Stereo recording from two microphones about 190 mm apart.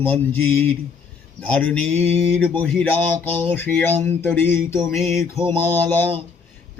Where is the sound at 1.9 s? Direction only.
30° right (ahead or behind).